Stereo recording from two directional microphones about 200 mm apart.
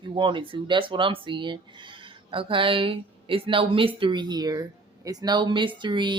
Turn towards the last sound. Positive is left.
turn(degrees=-25)  # may be behind; listen again after turning